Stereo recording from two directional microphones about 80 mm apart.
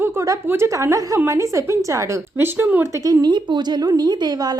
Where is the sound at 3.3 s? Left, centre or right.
Right.